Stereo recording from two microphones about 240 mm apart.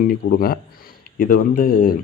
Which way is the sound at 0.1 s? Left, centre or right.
Left.